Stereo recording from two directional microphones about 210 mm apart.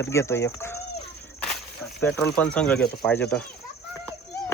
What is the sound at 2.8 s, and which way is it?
Speech, 50° left (ahead or behind).